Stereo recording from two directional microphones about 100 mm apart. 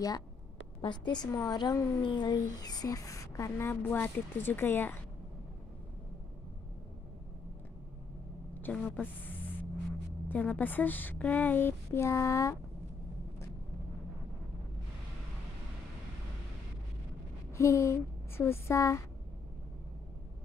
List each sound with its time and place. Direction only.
0.7 s a woman's voice: 45° left (ahead or behind)
1.3 s speech: 35° left (ahead or behind)
2.0 s a woman's voice: 50° left (ahead or behind); by 4.9 s 20° left (ahead or behind)
8.5 s vehicle: 15° left (ahead or behind)
10.2 s speech: 15° left (ahead or behind)
17.6 s speech: 30° left (ahead or behind)